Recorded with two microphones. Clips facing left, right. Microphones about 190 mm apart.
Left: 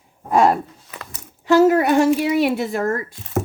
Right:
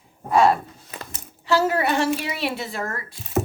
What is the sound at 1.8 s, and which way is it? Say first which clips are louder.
A woman's voice: left 7 dB; 45° left (ahead or behind).